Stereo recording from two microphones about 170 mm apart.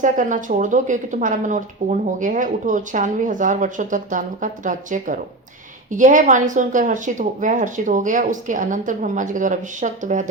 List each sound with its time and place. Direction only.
0.0 s speech: 50° right (ahead or behind)